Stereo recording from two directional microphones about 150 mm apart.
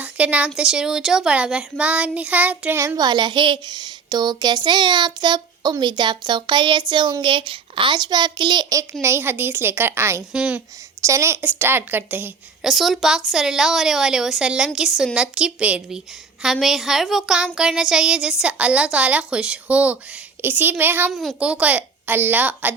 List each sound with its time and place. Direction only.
0.0 s speech: 10° right (ahead or behind); by 8.8 s 30° right (ahead or behind)
8.8 s a child's voice: 15° right (ahead or behind)
10.3 s a child's voice: 5° right (ahead or behind)
11.0 s a child's voice: 20° right (ahead or behind)
12.6 s a woman's voice: centre (ahead or behind)
21.1 s a child's voice: centre (ahead or behind)